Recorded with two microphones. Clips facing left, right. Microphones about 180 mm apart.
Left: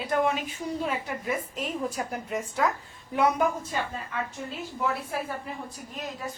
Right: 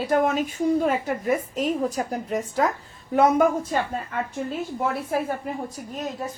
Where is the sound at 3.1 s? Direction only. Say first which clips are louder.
Right 6 dB; 50° right (ahead or behind).